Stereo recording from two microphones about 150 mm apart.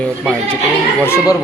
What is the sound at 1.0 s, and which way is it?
Speech, 20° left (ahead or behind).